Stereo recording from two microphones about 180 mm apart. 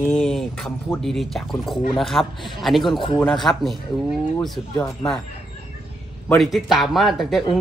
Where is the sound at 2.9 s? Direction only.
30° left (ahead or behind).